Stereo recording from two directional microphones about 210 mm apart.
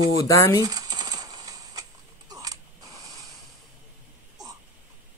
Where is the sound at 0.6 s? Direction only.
20° right (ahead or behind).